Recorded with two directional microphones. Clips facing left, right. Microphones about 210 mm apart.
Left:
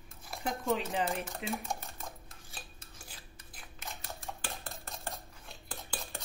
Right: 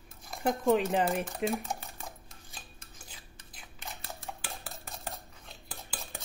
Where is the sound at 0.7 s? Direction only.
50° right (ahead or behind).